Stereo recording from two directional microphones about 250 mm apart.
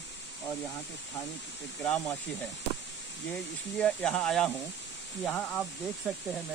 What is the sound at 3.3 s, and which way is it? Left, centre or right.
Speech, centre.